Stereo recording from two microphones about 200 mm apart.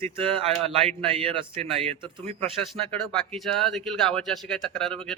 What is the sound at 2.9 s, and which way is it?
Speech, centre (ahead or behind).